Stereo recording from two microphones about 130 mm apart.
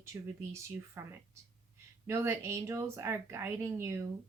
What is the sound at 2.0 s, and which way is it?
Speech, 20° right (ahead or behind).